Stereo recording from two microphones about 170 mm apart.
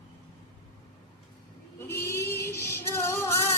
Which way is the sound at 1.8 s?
15° left (ahead or behind).